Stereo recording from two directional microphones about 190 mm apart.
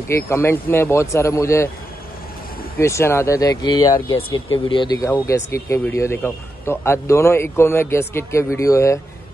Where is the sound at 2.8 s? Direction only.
15° left (ahead or behind).